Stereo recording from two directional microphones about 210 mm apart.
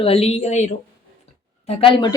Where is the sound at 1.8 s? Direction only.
20° left (ahead or behind).